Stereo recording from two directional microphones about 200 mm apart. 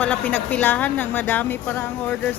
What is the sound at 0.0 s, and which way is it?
A woman's voice, 5° left (ahead or behind).